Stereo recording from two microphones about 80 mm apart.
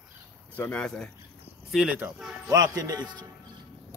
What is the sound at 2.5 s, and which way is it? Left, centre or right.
Speech, right.